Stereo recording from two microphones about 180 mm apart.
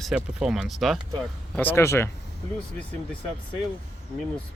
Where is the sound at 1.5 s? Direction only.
10° left (ahead or behind).